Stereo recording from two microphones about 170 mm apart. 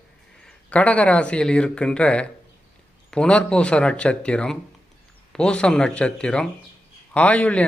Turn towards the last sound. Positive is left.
turn(degrees=10)  # may be behind; listen again after turning